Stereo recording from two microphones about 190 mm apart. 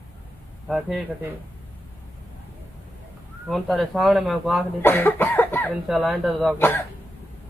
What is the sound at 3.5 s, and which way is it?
A woman's voice, centre (ahead or behind).